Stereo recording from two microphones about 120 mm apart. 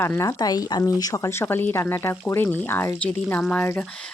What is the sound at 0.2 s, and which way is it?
A woman's voice, 30° left (ahead or behind).